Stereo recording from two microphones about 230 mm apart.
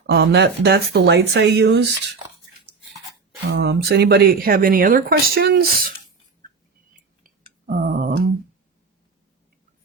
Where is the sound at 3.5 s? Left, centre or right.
Right.